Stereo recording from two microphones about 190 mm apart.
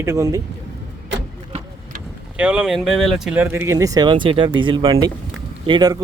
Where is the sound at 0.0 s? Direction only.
15° right (ahead or behind).